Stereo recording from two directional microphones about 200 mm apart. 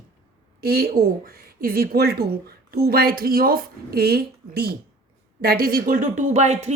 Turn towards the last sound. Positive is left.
turn(degrees=-35)  # may be behind; listen again after turning